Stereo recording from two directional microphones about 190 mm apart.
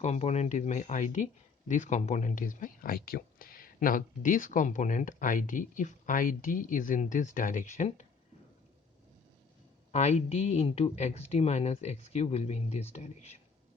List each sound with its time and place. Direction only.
0.0 s speech: 35° left (ahead or behind)
9.9 s speech: 35° left (ahead or behind)